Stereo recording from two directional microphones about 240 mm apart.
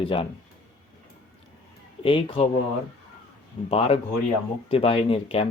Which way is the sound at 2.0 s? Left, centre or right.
Left.